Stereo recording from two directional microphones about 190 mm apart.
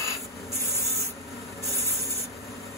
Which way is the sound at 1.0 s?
15° left (ahead or behind).